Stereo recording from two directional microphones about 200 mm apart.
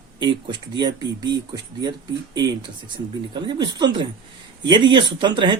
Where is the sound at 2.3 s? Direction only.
20° right (ahead or behind).